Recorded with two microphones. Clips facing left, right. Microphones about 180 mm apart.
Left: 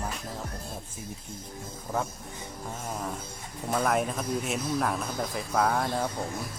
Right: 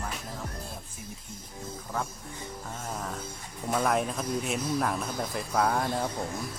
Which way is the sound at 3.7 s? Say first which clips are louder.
Even; centre (ahead or behind).